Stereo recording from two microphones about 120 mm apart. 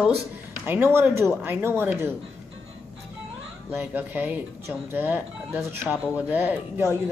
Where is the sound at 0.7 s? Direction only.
15° right (ahead or behind).